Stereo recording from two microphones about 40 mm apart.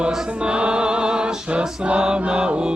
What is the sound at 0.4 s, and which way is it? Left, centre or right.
Music, right.